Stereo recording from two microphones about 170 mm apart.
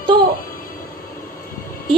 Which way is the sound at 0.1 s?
25° right (ahead or behind).